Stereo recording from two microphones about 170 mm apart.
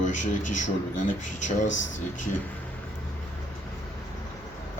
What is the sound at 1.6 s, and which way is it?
Speech, 90° left.